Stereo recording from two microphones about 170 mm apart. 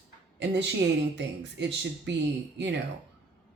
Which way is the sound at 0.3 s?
90° right.